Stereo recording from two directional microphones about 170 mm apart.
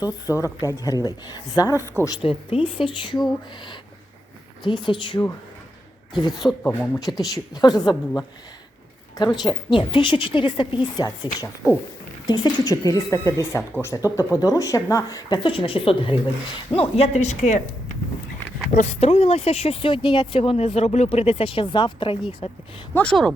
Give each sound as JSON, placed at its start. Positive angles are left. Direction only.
{"t": 0.0, "sound": "a woman's voice", "side_deg": 20}
{"t": 2.2, "sound": "speech", "side_deg": 30}
{"t": 4.6, "sound": "a woman's voice", "side_deg": 30}
{"t": 6.3, "sound": "speech", "side_deg": 0}
{"t": 6.6, "sound": "a woman's voice", "side_deg": 15}
{"t": 23.0, "sound": "speech", "side_deg": 5}